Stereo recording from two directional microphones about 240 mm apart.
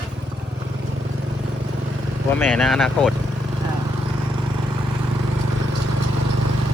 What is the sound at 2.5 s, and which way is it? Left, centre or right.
Speech, centre.